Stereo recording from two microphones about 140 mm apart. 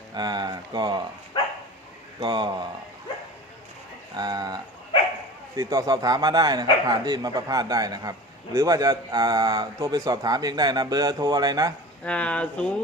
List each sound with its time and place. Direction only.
0.1 s speech: 30° right (ahead or behind)
2.2 s speech: 35° right (ahead or behind)
4.2 s speech: 30° right (ahead or behind)
12.0 s speech: 10° left (ahead or behind)